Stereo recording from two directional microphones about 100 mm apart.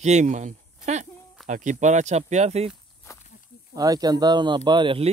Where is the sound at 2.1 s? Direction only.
90° right.